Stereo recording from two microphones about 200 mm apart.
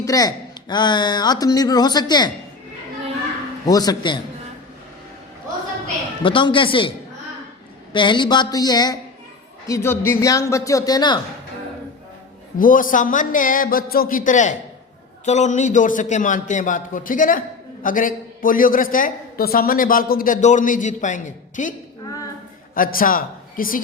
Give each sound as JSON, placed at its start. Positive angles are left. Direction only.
{"t": 0.0, "sound": "speech", "side_deg": 20}
{"t": 3.7, "sound": "speech", "side_deg": 20}
{"t": 6.2, "sound": "speech", "side_deg": 25}
{"t": 7.9, "sound": "speech", "side_deg": 25}
{"t": 12.5, "sound": "a man's voice", "side_deg": 45}